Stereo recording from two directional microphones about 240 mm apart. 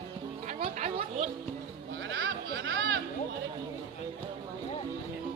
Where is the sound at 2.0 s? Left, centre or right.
Right.